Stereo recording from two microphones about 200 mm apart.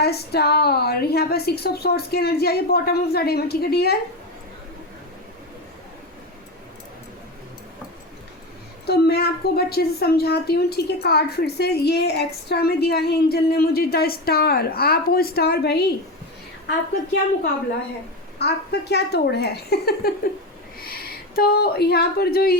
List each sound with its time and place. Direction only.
0.0 s a woman's voice: 55° left (ahead or behind)
8.9 s a woman's voice: 55° left (ahead or behind)
18.3 s a woman's voice: 55° left (ahead or behind)